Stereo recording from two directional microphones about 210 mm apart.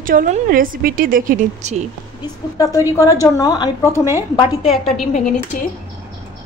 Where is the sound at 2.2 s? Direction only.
15° left (ahead or behind).